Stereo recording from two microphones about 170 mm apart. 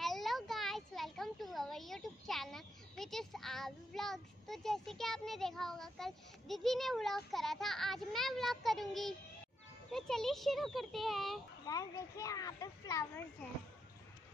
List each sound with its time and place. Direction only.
0.0 s a child's voice: centre (ahead or behind)
11.6 s a child's voice: 20° left (ahead or behind)